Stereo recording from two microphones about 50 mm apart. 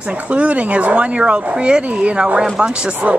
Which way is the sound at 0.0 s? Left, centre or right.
Right.